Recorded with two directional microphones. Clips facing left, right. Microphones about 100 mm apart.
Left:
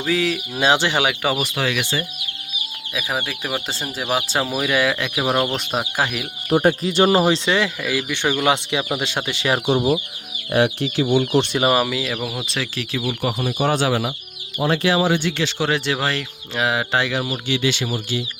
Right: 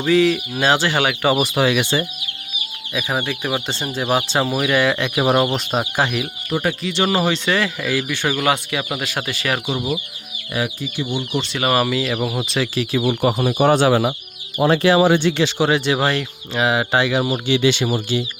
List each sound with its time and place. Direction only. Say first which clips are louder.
0.0 s speech: right 6 dB; centre (ahead or behind)
0.6 s speech: even; 15° left (ahead or behind)
1.3 s speech: right 5 dB; 15° right (ahead or behind)
2.9 s speech: right 3 dB; centre (ahead or behind)
6.6 s speech: left 4 dB; 35° left (ahead or behind)
7.8 s speech: right 1 dB; 10° left (ahead or behind); by 10.0 s 30° left (ahead or behind)
10.5 s speech: left 6 dB; 70° left (ahead or behind)
11.7 s speech: right 1 dB; 5° left (ahead or behind)
13.1 s speech: right 4 dB; 40° right (ahead or behind)
15.2 s speech: right 5 dB; 20° right (ahead or behind)
17.4 s speech: right 5 dB; 20° right (ahead or behind)